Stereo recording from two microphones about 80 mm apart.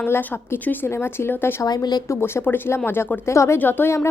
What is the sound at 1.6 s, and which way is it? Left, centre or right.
Speech, left.